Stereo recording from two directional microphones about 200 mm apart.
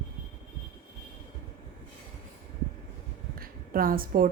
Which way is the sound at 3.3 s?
45° right (ahead or behind).